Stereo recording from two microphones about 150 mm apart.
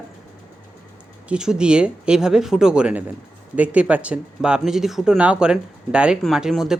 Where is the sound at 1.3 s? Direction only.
5° right (ahead or behind).